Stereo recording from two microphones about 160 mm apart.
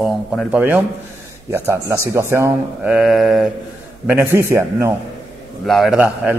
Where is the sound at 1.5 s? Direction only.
15° right (ahead or behind).